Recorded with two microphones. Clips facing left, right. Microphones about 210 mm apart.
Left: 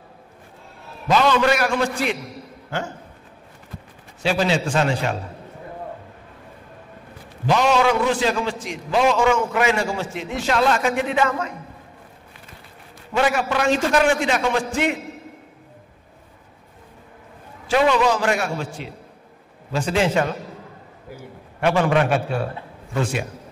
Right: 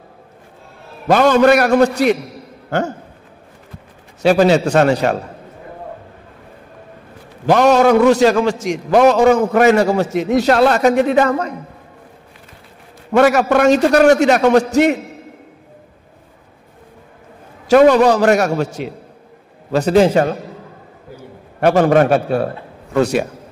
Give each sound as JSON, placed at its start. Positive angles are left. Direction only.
{"t": 1.0, "sound": "a man's voice", "side_deg": -50}
{"t": 4.2, "sound": "a man's voice", "side_deg": -45}
{"t": 7.4, "sound": "a man's voice", "side_deg": -55}
{"t": 13.1, "sound": "a man's voice", "side_deg": -55}
{"t": 17.6, "sound": "a man's voice", "side_deg": -45}
{"t": 18.2, "sound": "a man's voice", "side_deg": -40}